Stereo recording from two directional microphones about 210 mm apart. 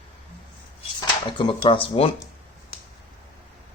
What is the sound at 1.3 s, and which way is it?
Speech, 20° left (ahead or behind).